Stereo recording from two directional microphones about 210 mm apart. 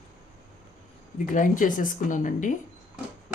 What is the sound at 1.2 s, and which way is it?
A woman's voice, 40° left (ahead or behind).